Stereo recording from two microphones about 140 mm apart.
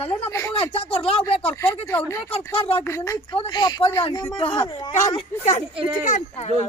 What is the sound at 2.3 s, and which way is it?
Speech, 45° left (ahead or behind).